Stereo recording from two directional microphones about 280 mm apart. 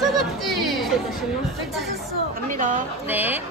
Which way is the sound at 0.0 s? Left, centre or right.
Centre.